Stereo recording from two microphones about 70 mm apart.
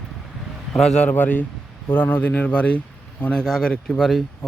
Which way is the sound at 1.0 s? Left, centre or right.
Left.